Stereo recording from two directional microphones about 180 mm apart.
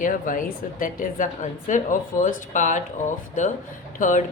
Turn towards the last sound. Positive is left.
turn(degrees=45)  # may be behind; listen again after turning